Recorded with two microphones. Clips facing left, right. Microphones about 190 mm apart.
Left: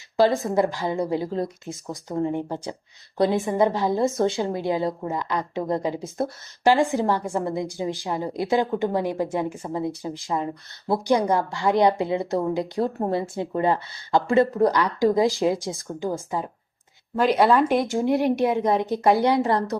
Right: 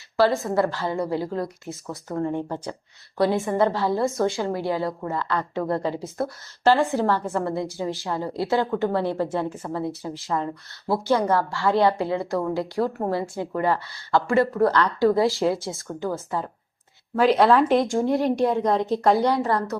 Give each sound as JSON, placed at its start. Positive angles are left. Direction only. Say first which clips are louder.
{"t": 0.2, "sound": "a woman's voice", "louder": "left 1 dB", "side_deg": 15}
{"t": 17.2, "sound": "a woman's voice", "louder": "right 1 dB", "side_deg": 0}